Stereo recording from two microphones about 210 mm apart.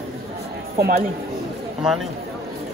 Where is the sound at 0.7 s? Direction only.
45° right (ahead or behind).